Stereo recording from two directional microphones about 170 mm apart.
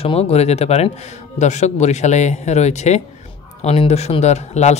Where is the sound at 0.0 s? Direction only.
35° left (ahead or behind).